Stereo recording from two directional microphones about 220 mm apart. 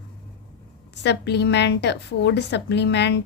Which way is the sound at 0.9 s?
50° left (ahead or behind).